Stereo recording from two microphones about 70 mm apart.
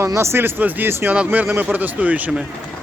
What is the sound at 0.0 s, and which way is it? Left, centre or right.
Speech, right.